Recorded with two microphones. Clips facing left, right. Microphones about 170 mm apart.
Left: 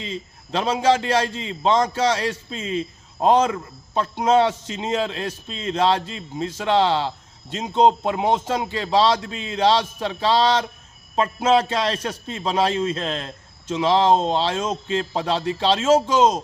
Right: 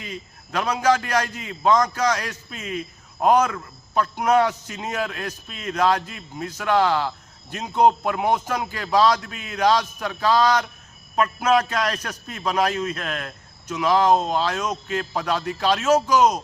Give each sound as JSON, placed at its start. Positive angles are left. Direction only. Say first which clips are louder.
{"t": 0.0, "sound": "a man's voice", "louder": "left 4 dB", "side_deg": 25}